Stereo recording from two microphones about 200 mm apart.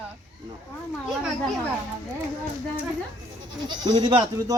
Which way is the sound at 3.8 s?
20° right (ahead or behind).